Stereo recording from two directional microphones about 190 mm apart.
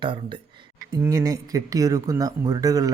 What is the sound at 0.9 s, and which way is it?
Speech, 15° right (ahead or behind).